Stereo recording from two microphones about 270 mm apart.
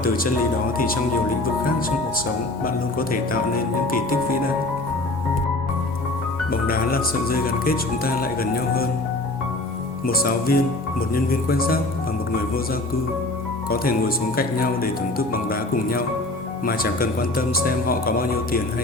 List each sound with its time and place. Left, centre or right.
0.0 s speech: left
2.6 s speech: left
6.5 s speech: left
10.1 s speech: left
14.3 s speech: left